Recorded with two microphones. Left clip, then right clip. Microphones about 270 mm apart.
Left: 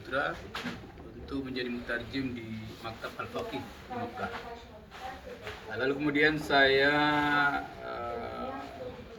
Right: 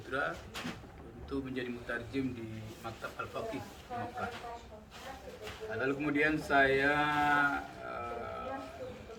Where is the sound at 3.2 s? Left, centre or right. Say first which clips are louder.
Left 1 dB; centre.